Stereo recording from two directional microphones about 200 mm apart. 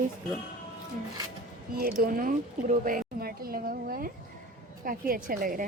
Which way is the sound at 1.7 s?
50° right (ahead or behind).